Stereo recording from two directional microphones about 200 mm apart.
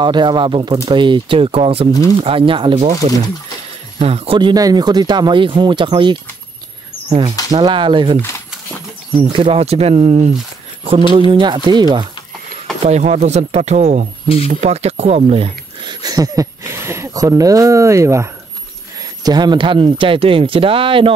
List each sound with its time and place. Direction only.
0.0 s speech: 20° right (ahead or behind)
4.0 s speech: 30° right (ahead or behind)
9.3 s speech: 30° right (ahead or behind)
12.8 s speech: 35° right (ahead or behind)